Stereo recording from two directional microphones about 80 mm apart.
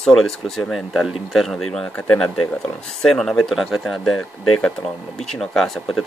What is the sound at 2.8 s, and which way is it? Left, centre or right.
Speech, centre.